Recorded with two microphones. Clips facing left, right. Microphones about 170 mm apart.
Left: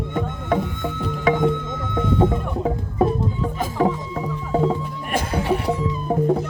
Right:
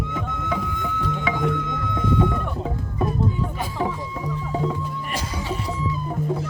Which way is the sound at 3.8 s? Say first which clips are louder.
Left 6 dB; 45° left (ahead or behind).